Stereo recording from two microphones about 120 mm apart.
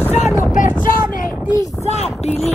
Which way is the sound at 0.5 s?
90° left.